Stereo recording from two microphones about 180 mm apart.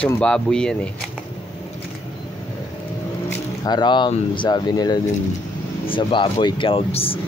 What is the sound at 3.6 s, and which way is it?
Speech, 25° left (ahead or behind).